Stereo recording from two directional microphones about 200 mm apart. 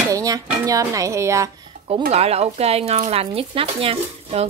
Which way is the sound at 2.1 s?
30° right (ahead or behind).